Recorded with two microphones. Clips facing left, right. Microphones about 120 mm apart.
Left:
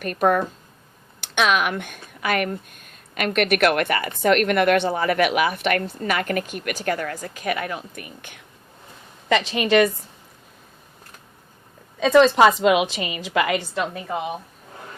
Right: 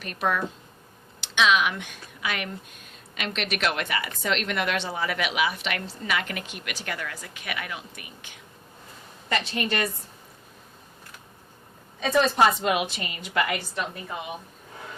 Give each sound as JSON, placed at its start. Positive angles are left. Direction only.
{"t": 0.0, "sound": "speech", "side_deg": 50}
{"t": 9.3, "sound": "a woman's voice", "side_deg": 90}
{"t": 11.9, "sound": "a woman's voice", "side_deg": 90}